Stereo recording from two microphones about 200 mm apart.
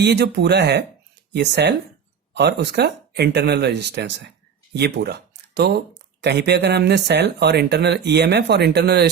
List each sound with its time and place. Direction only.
0.0 s speech: 55° right (ahead or behind)